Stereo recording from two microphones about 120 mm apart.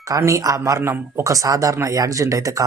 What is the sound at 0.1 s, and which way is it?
Speech, 25° right (ahead or behind).